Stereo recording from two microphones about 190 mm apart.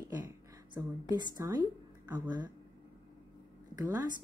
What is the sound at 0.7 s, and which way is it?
Speech, 20° right (ahead or behind).